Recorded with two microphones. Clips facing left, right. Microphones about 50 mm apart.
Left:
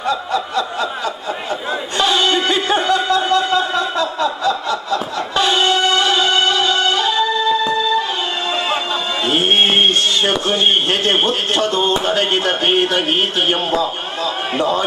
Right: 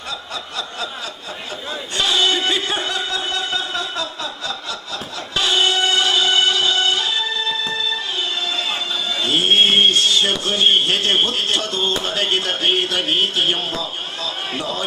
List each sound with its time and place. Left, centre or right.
0.1 s a sound: left
2.0 s music: left
3.0 s a sound: centre
5.7 s music: centre
6.0 s music: left
7.2 s music: centre
9.2 s music: centre
9.5 s a sound: left
14.6 s a man's voice: left